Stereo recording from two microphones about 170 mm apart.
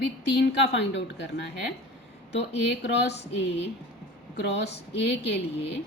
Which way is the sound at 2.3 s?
90° left.